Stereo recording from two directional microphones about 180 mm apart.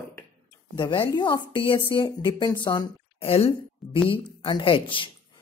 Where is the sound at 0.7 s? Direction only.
25° left (ahead or behind).